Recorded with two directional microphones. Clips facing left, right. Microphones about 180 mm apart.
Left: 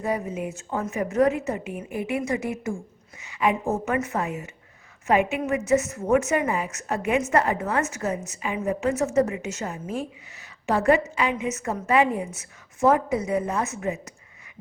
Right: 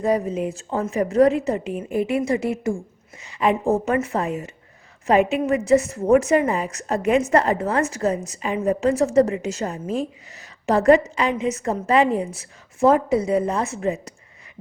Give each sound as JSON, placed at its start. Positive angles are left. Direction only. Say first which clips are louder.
{"t": 0.0, "sound": "a woman's voice", "louder": "right 6 dB", "side_deg": -35}
{"t": 10.3, "sound": "a sound", "louder": "right 4 dB", "side_deg": -40}
{"t": 11.1, "sound": "a woman's voice", "louder": "right 4 dB", "side_deg": -35}